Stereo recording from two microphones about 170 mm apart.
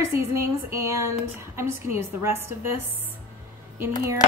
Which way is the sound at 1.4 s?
15° right (ahead or behind).